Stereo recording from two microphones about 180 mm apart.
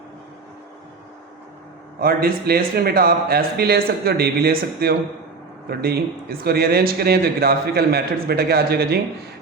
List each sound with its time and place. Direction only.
2.0 s a man's voice: 55° right (ahead or behind)